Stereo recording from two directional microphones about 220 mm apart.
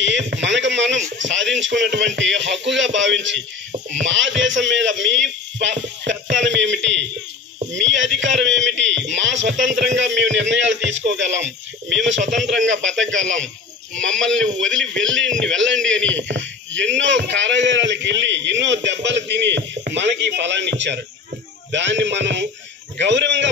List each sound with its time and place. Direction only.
0.0 s a sound: 55° right (ahead or behind)
1.1 s speech: 55° right (ahead or behind)
15.0 s a man's voice: 55° right (ahead or behind)